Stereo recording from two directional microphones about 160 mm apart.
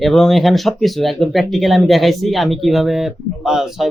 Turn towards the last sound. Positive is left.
turn(degrees=-5)  # may be behind; listen again after turning